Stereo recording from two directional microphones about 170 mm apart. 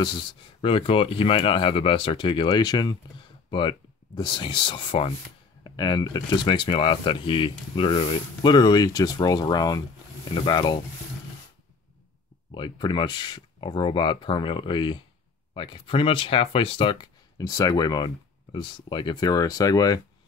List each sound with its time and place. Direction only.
0.0 s speech: 25° left (ahead or behind)
12.5 s speech: 25° left (ahead or behind)